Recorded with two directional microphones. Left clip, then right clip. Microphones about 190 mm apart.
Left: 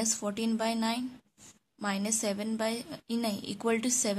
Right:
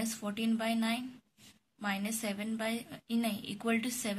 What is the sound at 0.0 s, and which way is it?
A woman's voice, 65° left (ahead or behind).